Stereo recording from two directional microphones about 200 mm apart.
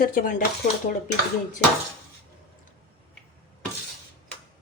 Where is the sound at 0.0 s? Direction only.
45° left (ahead or behind).